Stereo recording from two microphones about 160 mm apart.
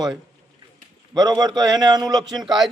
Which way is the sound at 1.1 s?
25° right (ahead or behind).